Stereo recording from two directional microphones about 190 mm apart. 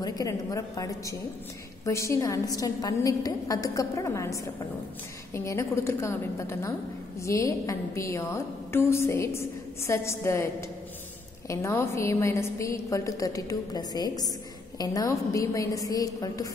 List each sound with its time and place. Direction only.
0.0 s a woman's voice: 20° left (ahead or behind)